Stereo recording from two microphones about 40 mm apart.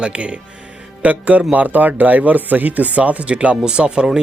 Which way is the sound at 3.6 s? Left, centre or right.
Right.